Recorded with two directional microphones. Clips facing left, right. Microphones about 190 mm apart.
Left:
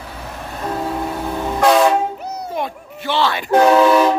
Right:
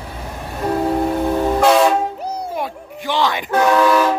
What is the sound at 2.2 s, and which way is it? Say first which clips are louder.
Music: right 3 dB; 30° right (ahead or behind).